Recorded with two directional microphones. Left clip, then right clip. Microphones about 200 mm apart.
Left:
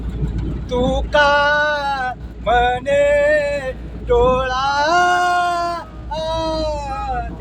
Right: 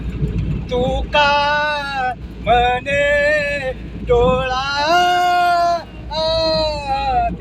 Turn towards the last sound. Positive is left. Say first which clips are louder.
# right 4 dB
turn(degrees=60)  # may be behind; listen again after turning